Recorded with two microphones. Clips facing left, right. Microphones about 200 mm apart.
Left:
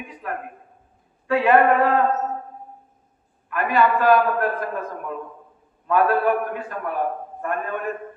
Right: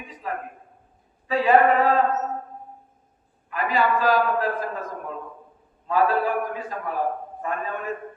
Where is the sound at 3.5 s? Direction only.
60° left (ahead or behind).